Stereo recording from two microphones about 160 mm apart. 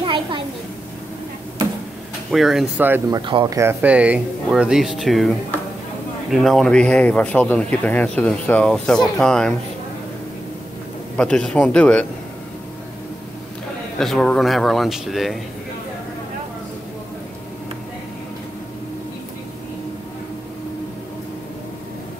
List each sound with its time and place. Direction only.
0.0 s a sound: 30° right (ahead or behind)
2.3 s speech: centre (ahead or behind)
3.1 s speech: 30° right (ahead or behind)
3.5 s speech: 10° right (ahead or behind)
6.3 s speech: centre (ahead or behind)
11.1 s speech: 5° left (ahead or behind)
13.9 s speech: 5° left (ahead or behind)